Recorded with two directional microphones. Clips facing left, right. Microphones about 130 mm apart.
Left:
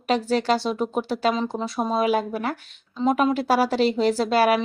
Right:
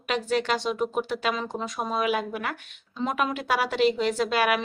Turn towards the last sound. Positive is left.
turn(degrees=35)  # may be behind; listen again after turning